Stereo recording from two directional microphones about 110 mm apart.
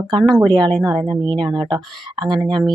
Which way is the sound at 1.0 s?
40° right (ahead or behind).